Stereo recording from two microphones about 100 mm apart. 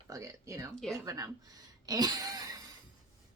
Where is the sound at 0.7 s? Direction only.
5° left (ahead or behind).